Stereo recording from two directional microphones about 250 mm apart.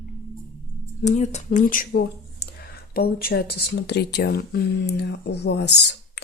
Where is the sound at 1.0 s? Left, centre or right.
Left.